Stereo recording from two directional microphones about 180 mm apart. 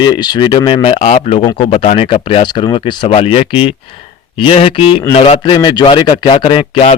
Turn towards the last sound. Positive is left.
turn(degrees=30)  # may be behind; listen again after turning